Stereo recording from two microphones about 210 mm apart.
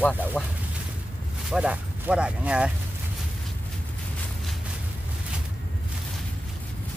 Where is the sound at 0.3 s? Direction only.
10° left (ahead or behind).